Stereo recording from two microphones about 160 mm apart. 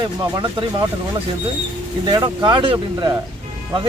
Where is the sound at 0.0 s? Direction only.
30° right (ahead or behind).